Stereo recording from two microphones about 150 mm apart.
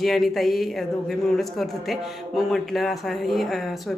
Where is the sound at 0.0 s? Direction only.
Centre (ahead or behind).